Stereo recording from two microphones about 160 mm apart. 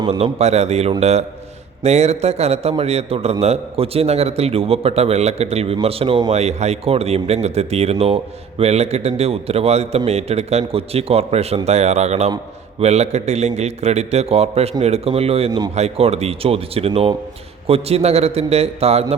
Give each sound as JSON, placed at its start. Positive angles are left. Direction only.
{"t": 0.1, "sound": "a man's voice", "side_deg": -40}
{"t": 6.3, "sound": "speech", "side_deg": -45}